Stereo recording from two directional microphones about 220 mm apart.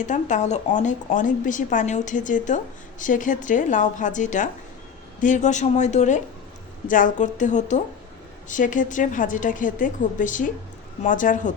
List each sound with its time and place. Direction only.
0.0 s speech: 35° left (ahead or behind)